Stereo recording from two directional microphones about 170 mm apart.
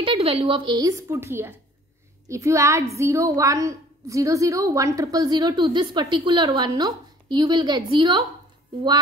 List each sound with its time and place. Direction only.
0.0 s a woman's voice: 35° right (ahead or behind)